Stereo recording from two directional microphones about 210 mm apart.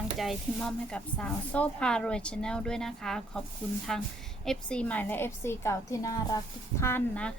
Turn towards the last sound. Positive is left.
turn(degrees=10)  # may be behind; listen again after turning